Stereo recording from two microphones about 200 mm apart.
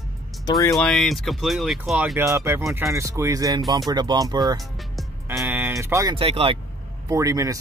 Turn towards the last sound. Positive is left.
turn(degrees=-15)  # may be behind; listen again after turning